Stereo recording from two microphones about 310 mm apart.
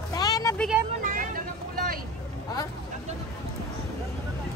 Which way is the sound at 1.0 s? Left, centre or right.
Right.